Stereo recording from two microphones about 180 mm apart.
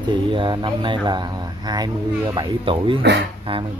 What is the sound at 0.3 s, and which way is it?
Speech, 25° right (ahead or behind).